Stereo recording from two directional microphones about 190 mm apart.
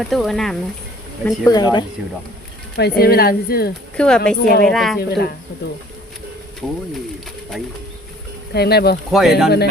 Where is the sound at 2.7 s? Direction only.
55° left (ahead or behind).